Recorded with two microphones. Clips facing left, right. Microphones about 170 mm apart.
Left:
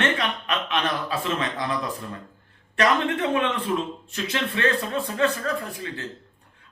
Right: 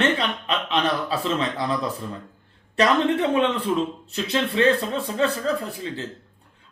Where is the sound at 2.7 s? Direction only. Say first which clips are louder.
Right 3 dB; 30° right (ahead or behind).